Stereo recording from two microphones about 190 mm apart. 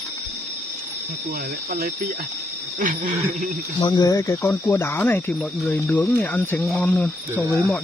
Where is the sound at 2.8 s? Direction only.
40° right (ahead or behind).